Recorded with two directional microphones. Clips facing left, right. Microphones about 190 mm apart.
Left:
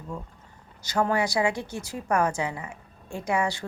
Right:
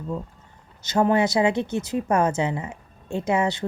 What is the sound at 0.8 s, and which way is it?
Speech, 20° right (ahead or behind).